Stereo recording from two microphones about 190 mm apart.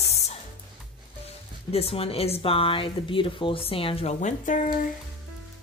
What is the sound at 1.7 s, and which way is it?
A woman's voice, 30° left (ahead or behind).